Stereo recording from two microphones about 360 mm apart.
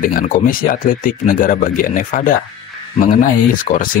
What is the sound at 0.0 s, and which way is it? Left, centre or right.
Speech, left.